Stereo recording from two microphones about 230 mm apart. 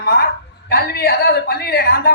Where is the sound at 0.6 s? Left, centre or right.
Left.